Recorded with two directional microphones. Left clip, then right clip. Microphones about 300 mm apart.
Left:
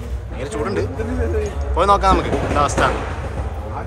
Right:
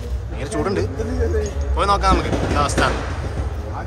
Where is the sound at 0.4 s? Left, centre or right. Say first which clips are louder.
Even; centre.